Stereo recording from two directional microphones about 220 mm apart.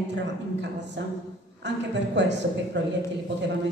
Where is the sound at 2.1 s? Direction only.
50° right (ahead or behind).